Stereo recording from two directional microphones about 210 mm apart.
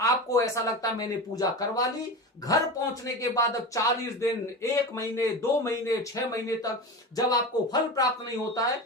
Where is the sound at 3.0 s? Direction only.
15° left (ahead or behind).